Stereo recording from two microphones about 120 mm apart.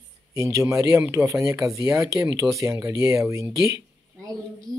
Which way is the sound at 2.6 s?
25° right (ahead or behind).